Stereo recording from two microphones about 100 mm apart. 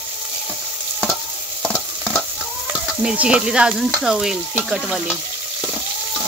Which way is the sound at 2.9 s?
10° right (ahead or behind).